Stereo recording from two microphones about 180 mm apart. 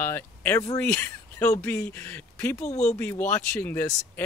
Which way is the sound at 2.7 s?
40° left (ahead or behind).